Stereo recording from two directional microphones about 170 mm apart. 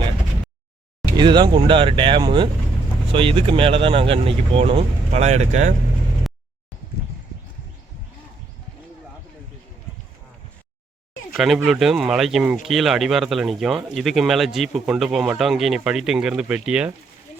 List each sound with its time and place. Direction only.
1.1 s speech: 25° right (ahead or behind); by 5.7 s 45° right (ahead or behind)
11.3 s speech: centre (ahead or behind)